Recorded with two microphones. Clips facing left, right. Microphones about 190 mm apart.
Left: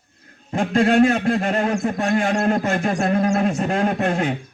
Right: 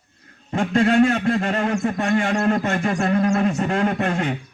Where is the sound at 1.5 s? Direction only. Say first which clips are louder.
Left 1 dB; 35° left (ahead or behind).